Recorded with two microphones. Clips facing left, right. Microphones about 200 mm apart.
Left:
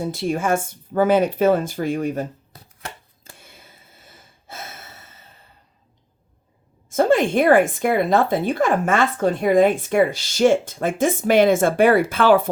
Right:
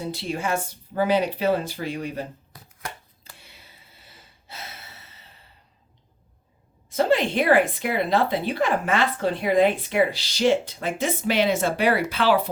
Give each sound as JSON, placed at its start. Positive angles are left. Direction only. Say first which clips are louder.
{"t": 0.0, "sound": "speech", "louder": "left 6 dB", "side_deg": 50}
{"t": 3.3, "sound": "a sound", "louder": "left 4 dB", "side_deg": 50}
{"t": 6.9, "sound": "speech", "louder": "left 4 dB", "side_deg": 50}